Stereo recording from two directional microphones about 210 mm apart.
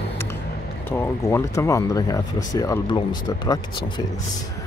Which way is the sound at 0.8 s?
10° left (ahead or behind).